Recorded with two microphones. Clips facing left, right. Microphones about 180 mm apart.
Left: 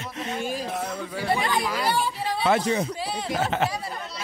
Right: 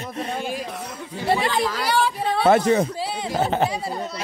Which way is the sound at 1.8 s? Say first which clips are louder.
Right 5 dB; 90° right.